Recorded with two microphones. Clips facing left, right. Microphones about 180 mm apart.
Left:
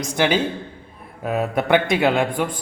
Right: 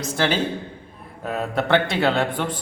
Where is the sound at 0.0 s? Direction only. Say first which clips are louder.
Left 2 dB; 15° left (ahead or behind).